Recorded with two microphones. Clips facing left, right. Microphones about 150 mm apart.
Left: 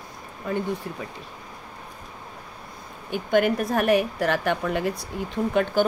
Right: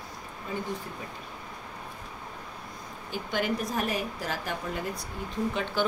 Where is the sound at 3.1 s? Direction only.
55° left (ahead or behind).